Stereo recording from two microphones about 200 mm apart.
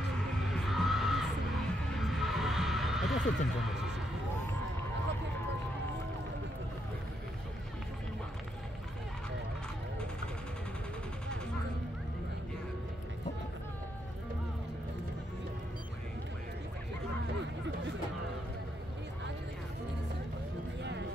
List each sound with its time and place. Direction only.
0.5 s music: centre (ahead or behind)
2.0 s heart sounds: centre (ahead or behind)